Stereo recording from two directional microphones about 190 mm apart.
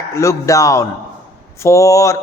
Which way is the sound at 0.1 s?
15° left (ahead or behind).